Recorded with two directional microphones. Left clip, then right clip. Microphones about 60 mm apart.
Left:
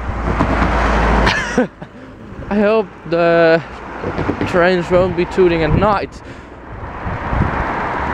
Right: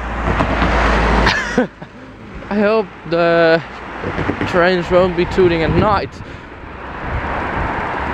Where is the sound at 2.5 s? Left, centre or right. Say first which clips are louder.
Left 1 dB; centre.